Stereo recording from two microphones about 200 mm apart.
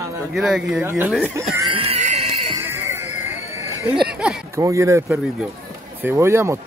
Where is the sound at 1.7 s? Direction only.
30° right (ahead or behind).